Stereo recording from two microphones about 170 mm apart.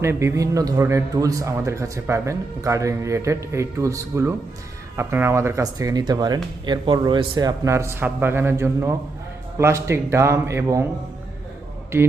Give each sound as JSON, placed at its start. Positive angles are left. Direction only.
{"t": 0.0, "sound": "a man's voice", "side_deg": -15}